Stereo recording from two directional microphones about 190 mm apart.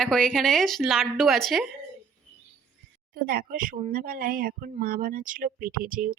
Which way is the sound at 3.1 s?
50° right (ahead or behind).